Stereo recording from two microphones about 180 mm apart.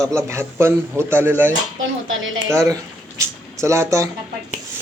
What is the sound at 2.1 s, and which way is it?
Speech, 90° right.